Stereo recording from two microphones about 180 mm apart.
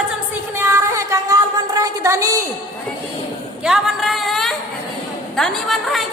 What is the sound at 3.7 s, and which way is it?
A woman's voice, 5° right (ahead or behind).